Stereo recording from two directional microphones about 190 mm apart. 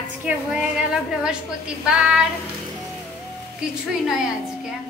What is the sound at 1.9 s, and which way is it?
Speech, 5° right (ahead or behind).